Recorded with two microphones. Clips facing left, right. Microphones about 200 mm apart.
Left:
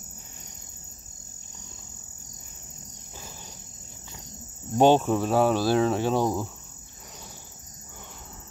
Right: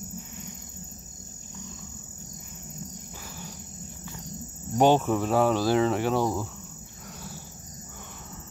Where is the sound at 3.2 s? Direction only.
20° left (ahead or behind).